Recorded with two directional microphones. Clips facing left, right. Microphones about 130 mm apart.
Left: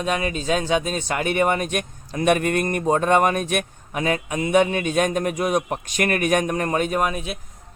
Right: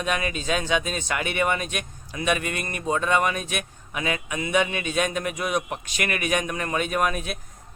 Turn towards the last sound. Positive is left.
turn(degrees=20)  # may be behind; listen again after turning